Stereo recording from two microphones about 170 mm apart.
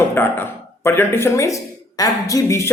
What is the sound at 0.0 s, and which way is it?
Speech, 15° left (ahead or behind).